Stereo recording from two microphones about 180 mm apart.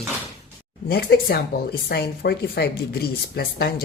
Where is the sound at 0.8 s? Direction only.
60° left (ahead or behind).